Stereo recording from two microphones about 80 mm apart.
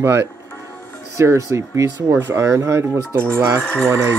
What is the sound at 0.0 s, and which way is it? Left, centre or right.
Speech, right.